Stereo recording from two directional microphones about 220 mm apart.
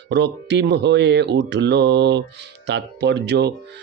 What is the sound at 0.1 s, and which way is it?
Music, 50° right (ahead or behind).